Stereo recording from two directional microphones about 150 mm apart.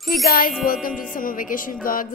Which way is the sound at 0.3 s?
70° left (ahead or behind).